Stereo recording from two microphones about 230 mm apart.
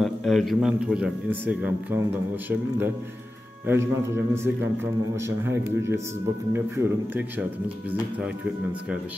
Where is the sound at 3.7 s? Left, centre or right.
Centre.